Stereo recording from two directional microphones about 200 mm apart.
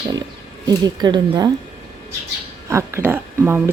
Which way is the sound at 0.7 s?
20° right (ahead or behind).